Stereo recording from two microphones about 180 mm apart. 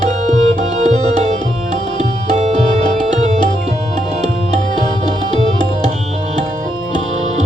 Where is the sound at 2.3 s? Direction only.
40° right (ahead or behind).